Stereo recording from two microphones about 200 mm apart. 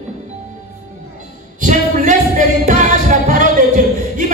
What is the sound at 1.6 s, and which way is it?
Music, 40° right (ahead or behind).